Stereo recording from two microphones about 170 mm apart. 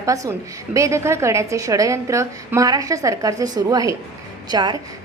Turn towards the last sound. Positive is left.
turn(degrees=-25)  # may be behind; listen again after turning